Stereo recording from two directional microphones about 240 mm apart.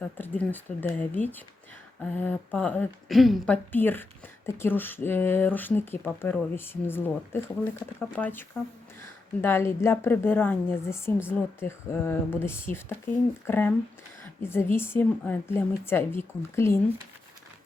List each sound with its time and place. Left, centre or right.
0.2 s speech: centre